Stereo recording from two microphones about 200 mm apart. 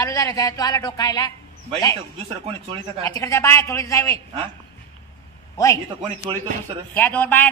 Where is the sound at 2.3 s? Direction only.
30° right (ahead or behind).